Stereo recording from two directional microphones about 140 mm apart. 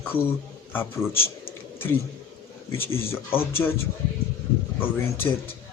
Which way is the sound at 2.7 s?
15° left (ahead or behind).